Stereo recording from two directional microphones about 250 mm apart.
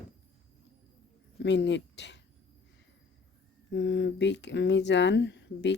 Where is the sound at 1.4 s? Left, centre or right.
Left.